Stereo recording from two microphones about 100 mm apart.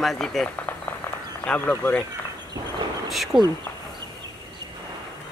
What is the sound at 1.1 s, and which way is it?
Run, 25° left (ahead or behind).